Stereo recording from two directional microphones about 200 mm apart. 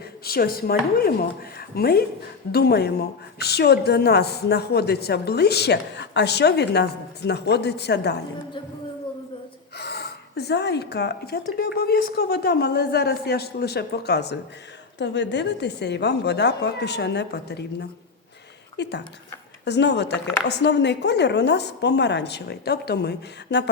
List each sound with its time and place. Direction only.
0.3 s a woman's voice: 50° left (ahead or behind)
9.7 s a woman's voice: 55° left (ahead or behind)
18.8 s a woman's voice: 60° left (ahead or behind)